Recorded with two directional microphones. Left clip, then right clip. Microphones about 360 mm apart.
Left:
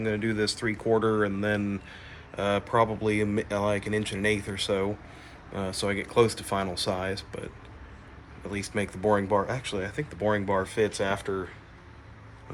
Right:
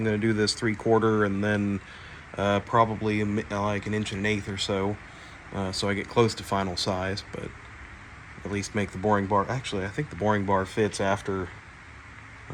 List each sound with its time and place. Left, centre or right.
0.3 s speech: centre